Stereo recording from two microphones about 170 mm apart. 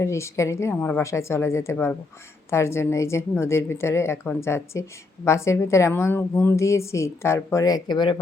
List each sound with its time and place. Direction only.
0.0 s a woman's voice: 15° left (ahead or behind)